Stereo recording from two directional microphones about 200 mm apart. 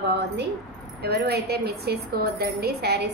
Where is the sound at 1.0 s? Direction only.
55° right (ahead or behind).